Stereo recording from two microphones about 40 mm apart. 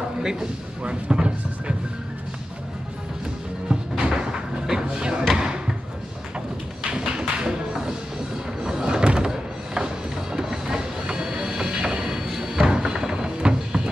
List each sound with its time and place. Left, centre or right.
0.2 s speech: centre
3.6 s music: centre
6.9 s tap: right
8.6 s a sound: centre
9.3 s music: centre